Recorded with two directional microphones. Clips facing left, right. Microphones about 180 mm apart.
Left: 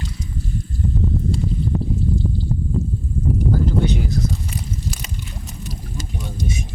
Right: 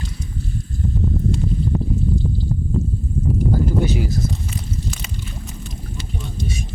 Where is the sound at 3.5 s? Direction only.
5° right (ahead or behind).